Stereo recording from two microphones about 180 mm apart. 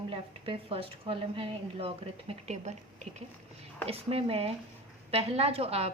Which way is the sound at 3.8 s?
35° right (ahead or behind).